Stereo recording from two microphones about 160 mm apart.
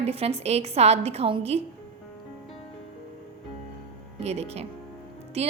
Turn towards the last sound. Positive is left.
turn(degrees=-40)  # may be behind; listen again after turning